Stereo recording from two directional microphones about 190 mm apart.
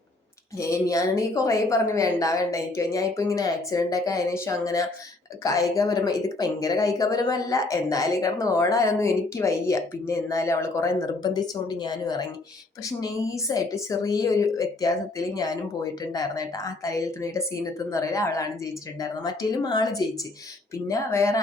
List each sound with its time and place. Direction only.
0.6 s a woman's voice: 15° left (ahead or behind)